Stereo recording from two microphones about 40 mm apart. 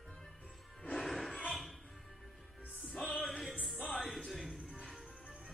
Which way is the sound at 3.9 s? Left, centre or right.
Centre.